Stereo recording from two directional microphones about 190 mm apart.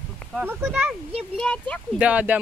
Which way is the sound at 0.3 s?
10° right (ahead or behind).